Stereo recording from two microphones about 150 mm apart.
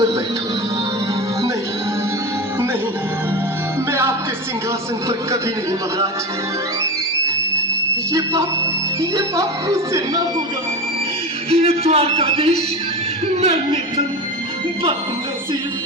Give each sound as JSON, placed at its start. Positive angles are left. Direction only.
{"t": 8.1, "sound": "speech", "side_deg": -20}
{"t": 11.5, "sound": "a man's voice", "side_deg": -45}